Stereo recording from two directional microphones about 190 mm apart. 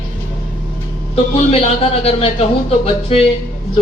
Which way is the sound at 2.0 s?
35° left (ahead or behind).